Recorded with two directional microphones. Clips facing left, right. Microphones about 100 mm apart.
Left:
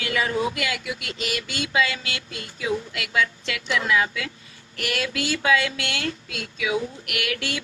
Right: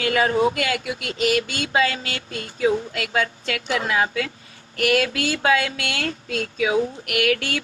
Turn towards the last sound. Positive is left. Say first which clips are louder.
# right 7 dB
turn(degrees=-45)  # may be behind; listen again after turning